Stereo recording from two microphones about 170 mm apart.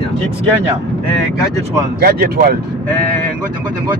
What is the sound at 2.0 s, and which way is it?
Speech, 60° right (ahead or behind).